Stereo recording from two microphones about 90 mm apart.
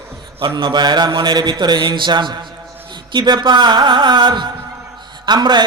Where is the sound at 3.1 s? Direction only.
55° right (ahead or behind).